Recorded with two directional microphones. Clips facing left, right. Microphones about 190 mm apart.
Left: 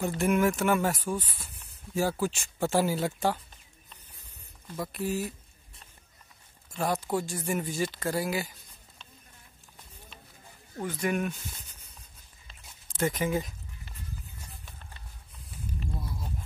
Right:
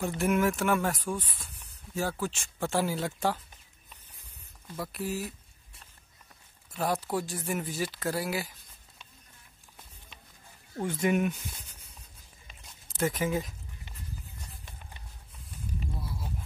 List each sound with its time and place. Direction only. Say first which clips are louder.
0.2 s speech: left 1 dB; centre (ahead or behind)
4.6 s speech: left 2 dB; 10° left (ahead or behind)
6.7 s speech: left 1 dB; 5° right (ahead or behind)
10.8 s speech: right 2 dB; 25° right (ahead or behind)
12.4 s a sound: even; 5° right (ahead or behind)
14.6 s clip-clop: right 1 dB; 15° right (ahead or behind)
16.0 s a sound: even; 5° right (ahead or behind)